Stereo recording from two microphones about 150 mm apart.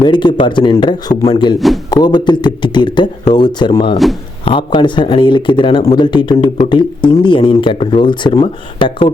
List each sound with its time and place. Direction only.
0.0 s speech: 30° left (ahead or behind)
1.5 s a man's voice: centre (ahead or behind)
1.9 s speech: 30° left (ahead or behind)
3.9 s a man's voice: centre (ahead or behind)
4.4 s speech: 35° left (ahead or behind)